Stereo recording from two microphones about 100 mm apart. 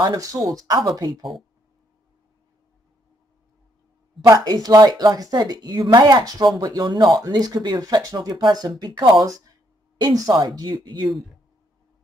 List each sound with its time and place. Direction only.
0.0 s speech: 40° right (ahead or behind)
4.5 s speech: 45° right (ahead or behind)